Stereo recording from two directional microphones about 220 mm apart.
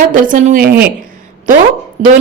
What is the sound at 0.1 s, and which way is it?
Speech, 35° right (ahead or behind).